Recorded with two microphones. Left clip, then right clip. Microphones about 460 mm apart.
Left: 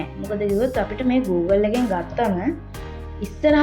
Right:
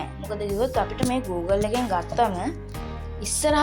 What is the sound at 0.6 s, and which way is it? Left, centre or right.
Speech, right.